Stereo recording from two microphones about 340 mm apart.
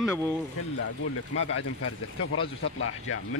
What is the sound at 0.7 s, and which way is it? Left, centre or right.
Speech, left.